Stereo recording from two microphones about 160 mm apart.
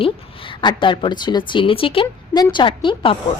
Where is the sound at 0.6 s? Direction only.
30° left (ahead or behind).